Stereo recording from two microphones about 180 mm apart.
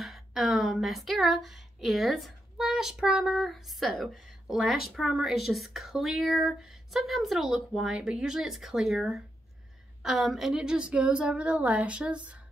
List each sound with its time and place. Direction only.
0.0 s a woman's voice: centre (ahead or behind)